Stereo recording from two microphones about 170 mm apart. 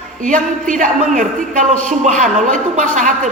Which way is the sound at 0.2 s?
50° right (ahead or behind).